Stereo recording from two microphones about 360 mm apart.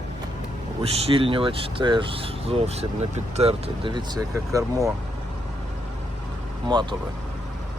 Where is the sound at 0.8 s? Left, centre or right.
Centre.